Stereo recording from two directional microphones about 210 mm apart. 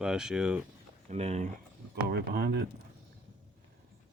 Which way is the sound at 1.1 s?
30° right (ahead or behind).